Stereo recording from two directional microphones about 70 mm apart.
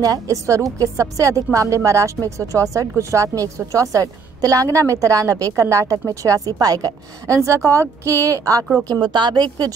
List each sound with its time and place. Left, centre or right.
0.0 s a woman's voice: right
8.8 s speech: right